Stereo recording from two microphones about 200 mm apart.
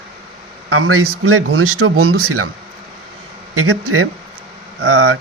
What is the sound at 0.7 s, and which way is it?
Speech, 90° right.